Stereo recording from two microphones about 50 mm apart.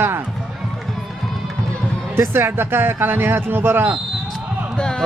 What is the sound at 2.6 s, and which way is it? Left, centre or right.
A man's voice, right.